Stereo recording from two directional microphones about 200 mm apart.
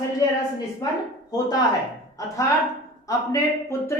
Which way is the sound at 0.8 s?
20° left (ahead or behind).